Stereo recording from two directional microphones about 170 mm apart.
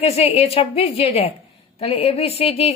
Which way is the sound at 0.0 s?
35° left (ahead or behind).